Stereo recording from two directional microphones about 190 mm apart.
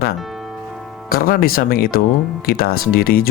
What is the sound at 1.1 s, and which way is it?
Speech, 50° left (ahead or behind).